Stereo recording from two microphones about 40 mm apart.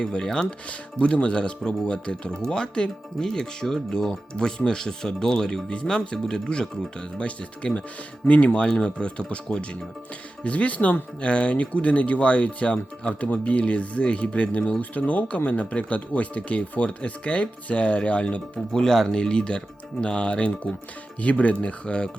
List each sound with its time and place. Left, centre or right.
0.0 s speech: left
0.9 s speech: left
7.2 s speech: left
8.6 s speech: left
18.7 s speech: centre